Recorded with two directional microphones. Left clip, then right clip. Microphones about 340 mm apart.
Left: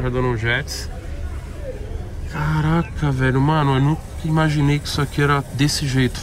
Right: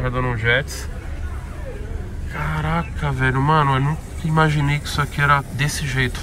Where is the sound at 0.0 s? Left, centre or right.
Centre.